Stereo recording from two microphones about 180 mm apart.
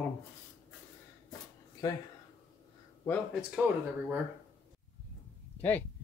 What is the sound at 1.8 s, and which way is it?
Speech, 20° left (ahead or behind).